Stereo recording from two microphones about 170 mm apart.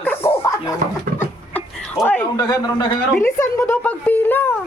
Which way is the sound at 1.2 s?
10° left (ahead or behind).